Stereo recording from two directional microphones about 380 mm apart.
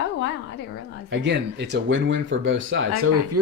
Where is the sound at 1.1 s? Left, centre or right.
Right.